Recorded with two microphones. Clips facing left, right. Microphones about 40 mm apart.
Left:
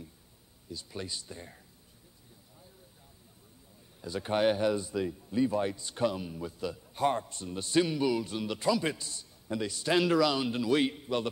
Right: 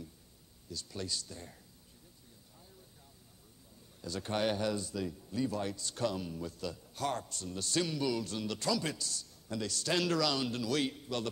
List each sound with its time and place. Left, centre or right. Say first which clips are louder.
0.7 s speech: left 1 dB; centre
4.0 s speech: left 6 dB; centre